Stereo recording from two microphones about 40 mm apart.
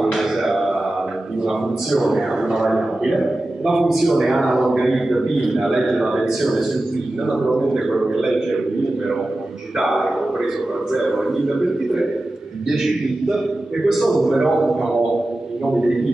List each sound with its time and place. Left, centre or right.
0.0 s music: centre
1.4 s a sound: centre
2.4 s a man's voice: centre
9.8 s a man's voice: centre